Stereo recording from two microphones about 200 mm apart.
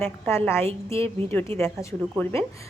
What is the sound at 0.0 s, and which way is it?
Speech, 10° left (ahead or behind).